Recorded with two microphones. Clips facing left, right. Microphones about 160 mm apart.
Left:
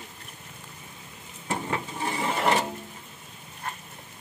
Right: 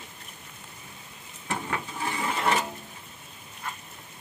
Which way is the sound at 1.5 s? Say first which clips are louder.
Left 2 dB; 20° left (ahead or behind).